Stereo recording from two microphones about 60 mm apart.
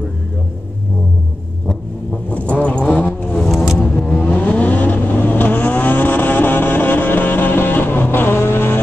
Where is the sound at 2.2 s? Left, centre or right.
Left.